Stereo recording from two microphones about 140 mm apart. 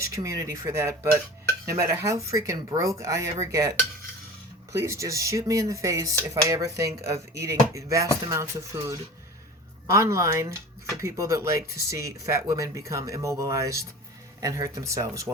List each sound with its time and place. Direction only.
0.0 s speech: 20° right (ahead or behind)